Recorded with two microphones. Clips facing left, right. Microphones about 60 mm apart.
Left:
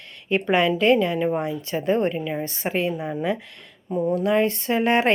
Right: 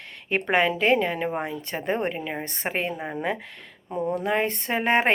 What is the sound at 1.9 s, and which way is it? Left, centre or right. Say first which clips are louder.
Speech: left 5 dB; right.